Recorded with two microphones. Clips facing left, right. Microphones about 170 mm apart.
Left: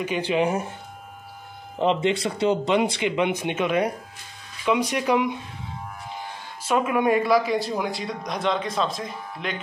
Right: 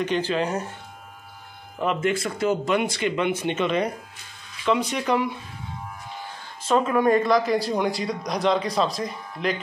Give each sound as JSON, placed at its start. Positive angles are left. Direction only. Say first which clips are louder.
{"t": 0.3, "sound": "speech", "louder": "left 3 dB", "side_deg": 10}
{"t": 1.8, "sound": "speech", "louder": "left 2 dB", "side_deg": 25}
{"t": 6.7, "sound": "a man's voice", "louder": "right 1 dB", "side_deg": 10}